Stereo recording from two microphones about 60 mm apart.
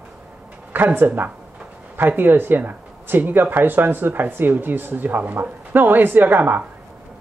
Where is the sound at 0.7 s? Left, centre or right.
Right.